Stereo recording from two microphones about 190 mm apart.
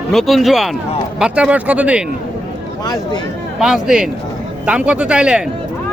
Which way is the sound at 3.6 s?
5° right (ahead or behind).